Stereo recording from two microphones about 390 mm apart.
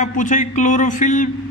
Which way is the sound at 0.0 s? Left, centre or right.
Centre.